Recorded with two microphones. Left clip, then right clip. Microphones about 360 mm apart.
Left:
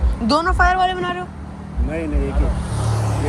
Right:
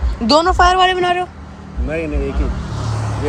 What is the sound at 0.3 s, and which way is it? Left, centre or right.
Speech, centre.